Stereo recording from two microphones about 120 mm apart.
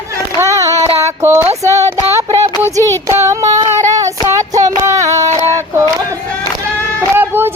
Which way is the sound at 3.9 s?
30° right (ahead or behind).